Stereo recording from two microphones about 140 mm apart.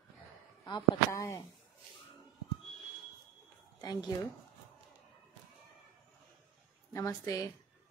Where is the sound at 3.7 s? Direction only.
25° left (ahead or behind).